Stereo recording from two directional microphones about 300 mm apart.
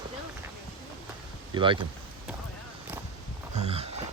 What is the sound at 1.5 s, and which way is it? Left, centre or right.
Speech, centre.